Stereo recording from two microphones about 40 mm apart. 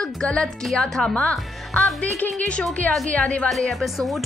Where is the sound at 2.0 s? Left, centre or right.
Left.